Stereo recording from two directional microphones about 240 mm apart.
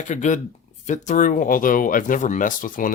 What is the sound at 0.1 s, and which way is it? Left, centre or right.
Speech, left.